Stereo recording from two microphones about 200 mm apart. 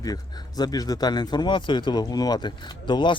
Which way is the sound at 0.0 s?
20° left (ahead or behind).